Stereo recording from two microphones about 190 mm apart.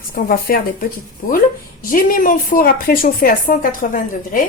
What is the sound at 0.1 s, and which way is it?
A woman's voice, 50° left (ahead or behind).